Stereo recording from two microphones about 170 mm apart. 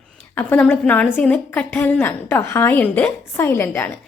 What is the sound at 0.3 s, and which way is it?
A woman's voice, 10° left (ahead or behind).